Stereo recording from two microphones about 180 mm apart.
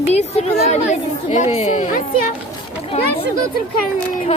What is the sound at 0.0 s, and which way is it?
Speech, 35° left (ahead or behind).